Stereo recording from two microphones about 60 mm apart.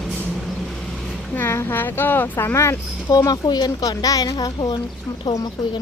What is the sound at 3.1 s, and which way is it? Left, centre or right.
Speech, left.